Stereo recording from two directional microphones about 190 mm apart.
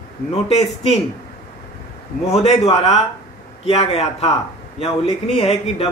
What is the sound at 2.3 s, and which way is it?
Speech, 35° left (ahead or behind).